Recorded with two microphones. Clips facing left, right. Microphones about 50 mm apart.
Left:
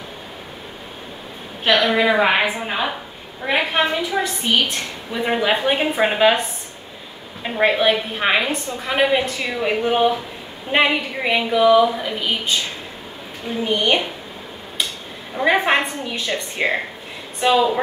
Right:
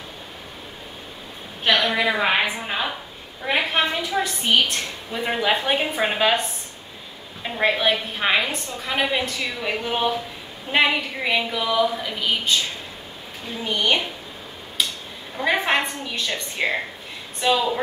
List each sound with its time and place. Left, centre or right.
1.6 s a woman's voice: centre
7.4 s a woman's voice: centre
13.7 s a woman's voice: centre
15.3 s a woman's voice: centre